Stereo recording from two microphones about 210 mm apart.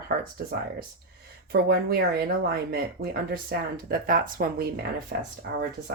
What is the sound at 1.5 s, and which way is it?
Speech, 50° right (ahead or behind).